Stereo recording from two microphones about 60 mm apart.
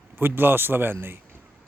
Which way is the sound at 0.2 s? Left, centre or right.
Right.